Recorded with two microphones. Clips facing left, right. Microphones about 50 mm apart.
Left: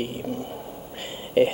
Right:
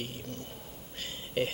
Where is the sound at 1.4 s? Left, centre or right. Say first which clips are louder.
Left 12 dB; centre.